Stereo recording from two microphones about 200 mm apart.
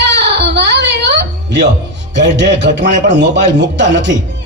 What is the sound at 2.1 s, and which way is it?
Speech, 60° right (ahead or behind).